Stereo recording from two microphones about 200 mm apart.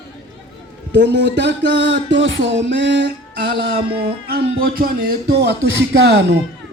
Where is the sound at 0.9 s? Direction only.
55° right (ahead or behind).